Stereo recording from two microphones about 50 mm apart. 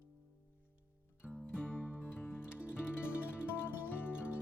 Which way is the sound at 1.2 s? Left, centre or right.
Centre.